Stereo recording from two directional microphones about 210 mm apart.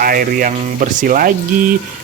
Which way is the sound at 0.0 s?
40° right (ahead or behind).